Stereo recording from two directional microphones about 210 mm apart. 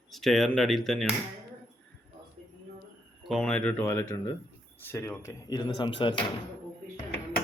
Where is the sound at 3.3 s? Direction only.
5° left (ahead or behind); by 6.3 s 25° left (ahead or behind).